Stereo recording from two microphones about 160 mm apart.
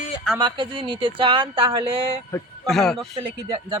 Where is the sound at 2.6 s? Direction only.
Centre (ahead or behind).